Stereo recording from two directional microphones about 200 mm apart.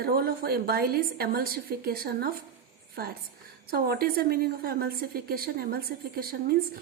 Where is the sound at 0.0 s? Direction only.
50° right (ahead or behind).